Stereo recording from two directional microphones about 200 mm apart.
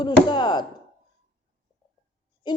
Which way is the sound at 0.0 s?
20° left (ahead or behind).